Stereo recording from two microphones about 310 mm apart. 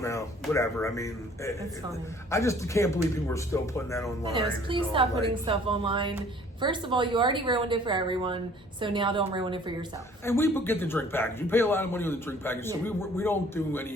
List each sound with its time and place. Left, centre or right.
0.0 s a man's voice: centre
4.7 s a woman's voice: centre
10.2 s a man's voice: centre